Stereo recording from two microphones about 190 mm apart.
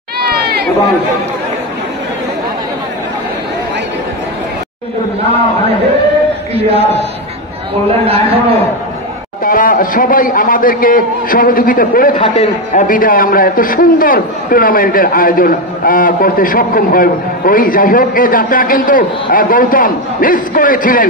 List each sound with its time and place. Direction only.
0.2 s a sound: 55° right (ahead or behind)
6.5 s speech: 30° right (ahead or behind)
8.1 s a sound: 30° right (ahead or behind)
9.4 s a man's voice: 45° left (ahead or behind)
12.2 s a man's voice: 35° left (ahead or behind)
12.8 s a man's voice: 45° left (ahead or behind)